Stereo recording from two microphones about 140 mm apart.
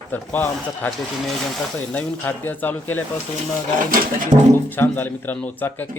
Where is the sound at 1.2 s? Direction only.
Centre (ahead or behind).